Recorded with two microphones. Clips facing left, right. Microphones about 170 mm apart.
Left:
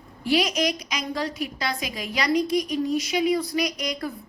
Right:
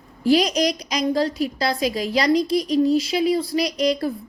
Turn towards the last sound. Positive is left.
turn(degrees=-30)  # may be behind; listen again after turning